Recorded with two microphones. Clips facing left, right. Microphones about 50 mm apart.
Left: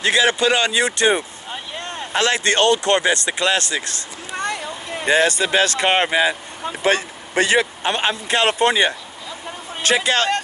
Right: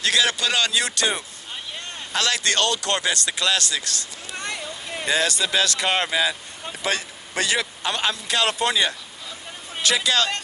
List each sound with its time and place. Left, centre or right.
0.0 s speech: left
1.5 s vehicle: centre
2.1 s speech: left
4.4 s a sound: centre
5.0 s speech: left